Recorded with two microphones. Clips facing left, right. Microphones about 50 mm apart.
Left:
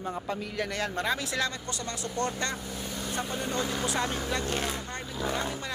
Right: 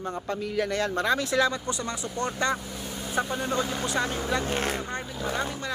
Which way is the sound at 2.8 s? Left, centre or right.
Centre.